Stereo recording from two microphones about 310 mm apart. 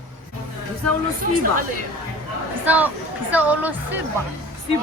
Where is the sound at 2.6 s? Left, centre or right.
Centre.